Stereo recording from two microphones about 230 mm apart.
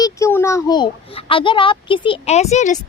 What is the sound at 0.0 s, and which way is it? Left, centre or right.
A child's voice, centre.